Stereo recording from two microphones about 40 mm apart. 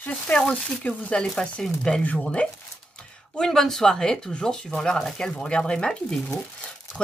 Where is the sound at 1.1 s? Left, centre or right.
Centre.